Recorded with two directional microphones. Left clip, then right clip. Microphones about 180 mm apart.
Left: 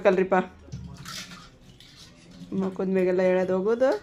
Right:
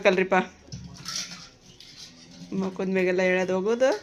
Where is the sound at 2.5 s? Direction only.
10° left (ahead or behind).